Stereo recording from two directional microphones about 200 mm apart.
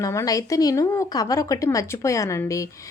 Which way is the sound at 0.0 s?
15° left (ahead or behind).